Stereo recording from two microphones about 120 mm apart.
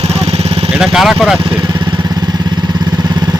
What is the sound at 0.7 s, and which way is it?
Speech, 5° right (ahead or behind).